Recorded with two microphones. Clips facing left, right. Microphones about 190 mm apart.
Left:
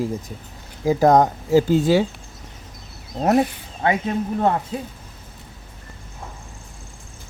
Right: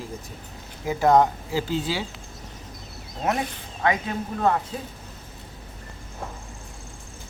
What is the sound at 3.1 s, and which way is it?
Speech, 40° left (ahead or behind).